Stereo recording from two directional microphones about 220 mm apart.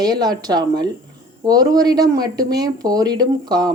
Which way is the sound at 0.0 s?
20° right (ahead or behind).